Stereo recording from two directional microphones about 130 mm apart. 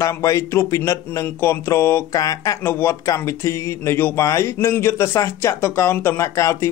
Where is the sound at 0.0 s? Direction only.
25° left (ahead or behind).